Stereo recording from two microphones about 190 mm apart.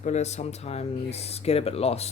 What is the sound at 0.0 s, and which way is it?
Speech, 35° left (ahead or behind).